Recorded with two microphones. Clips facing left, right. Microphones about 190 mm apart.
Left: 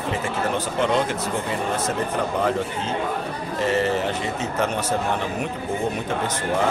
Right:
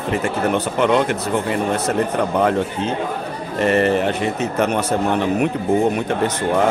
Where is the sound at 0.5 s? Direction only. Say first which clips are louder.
Right 5 dB; 65° right (ahead or behind).